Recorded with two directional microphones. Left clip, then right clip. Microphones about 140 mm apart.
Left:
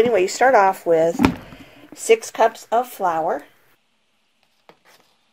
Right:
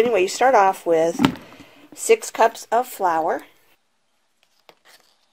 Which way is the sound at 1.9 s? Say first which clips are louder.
Left 1 dB; 35° right (ahead or behind).